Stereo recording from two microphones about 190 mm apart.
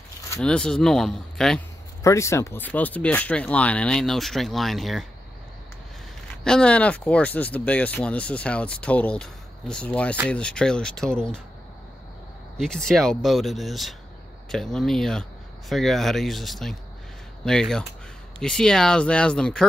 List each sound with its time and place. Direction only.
0.4 s speech: 5° left (ahead or behind)
2.0 s speech: 15° left (ahead or behind)
6.4 s speech: 5° left (ahead or behind)
12.5 s speech: centre (ahead or behind)